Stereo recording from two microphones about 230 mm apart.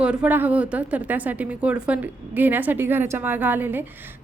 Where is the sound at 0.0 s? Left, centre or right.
Centre.